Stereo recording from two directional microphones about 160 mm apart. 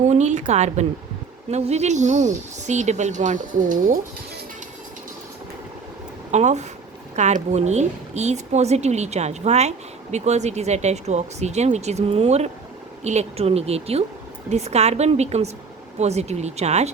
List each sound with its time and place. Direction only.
0.0 s speech: 45° right (ahead or behind)
6.3 s a woman's voice: 45° right (ahead or behind)